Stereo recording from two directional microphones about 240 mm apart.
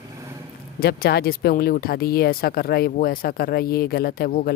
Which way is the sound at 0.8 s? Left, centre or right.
Left.